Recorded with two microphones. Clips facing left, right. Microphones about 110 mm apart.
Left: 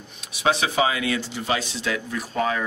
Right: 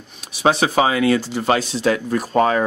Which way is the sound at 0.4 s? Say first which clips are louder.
Right 5 dB; 40° right (ahead or behind).